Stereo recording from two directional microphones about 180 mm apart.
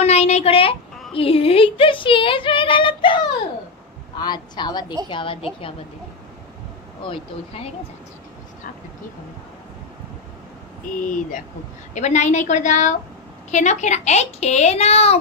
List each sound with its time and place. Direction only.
0.0 s a sound: 35° left (ahead or behind)
1.1 s speech: 30° left (ahead or behind)
7.0 s speech: 30° left (ahead or behind)
11.0 s speech: 45° left (ahead or behind)